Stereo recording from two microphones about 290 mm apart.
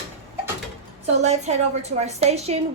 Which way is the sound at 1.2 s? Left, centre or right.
Right.